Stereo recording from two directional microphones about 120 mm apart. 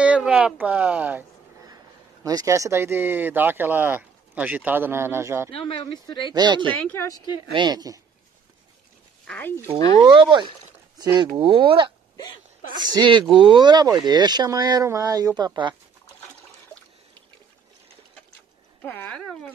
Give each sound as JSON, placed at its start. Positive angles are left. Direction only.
{"t": 0.0, "sound": "speech", "side_deg": -10}
{"t": 2.2, "sound": "speech", "side_deg": -25}
{"t": 5.5, "sound": "speech", "side_deg": 50}
{"t": 6.3, "sound": "speech", "side_deg": -40}
{"t": 6.7, "sound": "speech", "side_deg": 15}
{"t": 7.0, "sound": "speech", "side_deg": 30}
{"t": 7.5, "sound": "speech", "side_deg": -35}
{"t": 9.3, "sound": "speech", "side_deg": 15}
{"t": 9.9, "sound": "speech", "side_deg": -40}
{"t": 18.8, "sound": "speech", "side_deg": 15}